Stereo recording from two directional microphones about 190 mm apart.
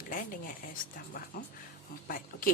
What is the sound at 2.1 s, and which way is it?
Speech, 45° left (ahead or behind).